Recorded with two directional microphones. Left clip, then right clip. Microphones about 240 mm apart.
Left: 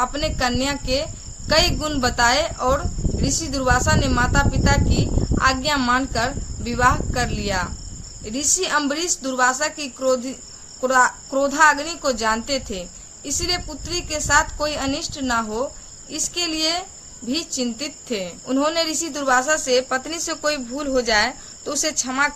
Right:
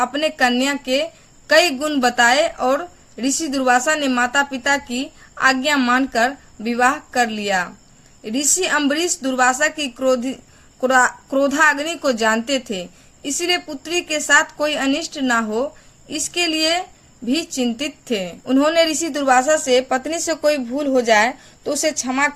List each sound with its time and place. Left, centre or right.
0.0 s a woman's voice: right
20.5 s speech: right
21.6 s a woman's voice: right